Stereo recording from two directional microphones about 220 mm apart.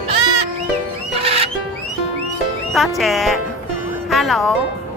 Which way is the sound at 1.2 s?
25° right (ahead or behind).